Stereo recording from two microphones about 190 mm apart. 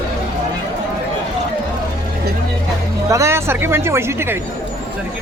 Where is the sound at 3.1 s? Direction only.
15° right (ahead or behind).